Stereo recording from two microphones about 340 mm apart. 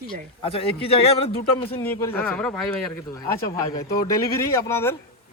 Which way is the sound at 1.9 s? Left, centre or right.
Centre.